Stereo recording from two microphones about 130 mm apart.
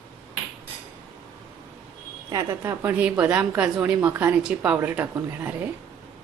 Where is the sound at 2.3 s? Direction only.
25° right (ahead or behind).